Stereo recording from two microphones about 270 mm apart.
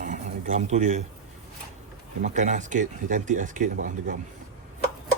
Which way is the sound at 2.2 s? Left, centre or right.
Right.